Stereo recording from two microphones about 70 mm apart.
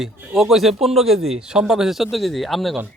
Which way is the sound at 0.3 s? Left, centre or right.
Centre.